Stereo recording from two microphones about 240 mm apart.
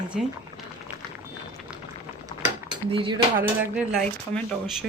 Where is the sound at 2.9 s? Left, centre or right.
Centre.